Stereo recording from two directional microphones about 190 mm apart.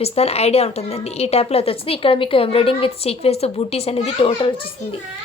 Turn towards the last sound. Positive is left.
turn(degrees=30)  # may be behind; listen again after turning